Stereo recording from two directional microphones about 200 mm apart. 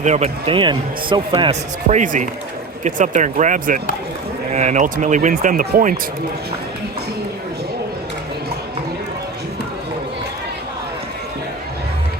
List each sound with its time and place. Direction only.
0.0 s speech: 35° right (ahead or behind)